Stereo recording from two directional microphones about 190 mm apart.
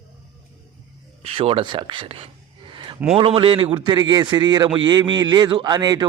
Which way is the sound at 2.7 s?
25° right (ahead or behind).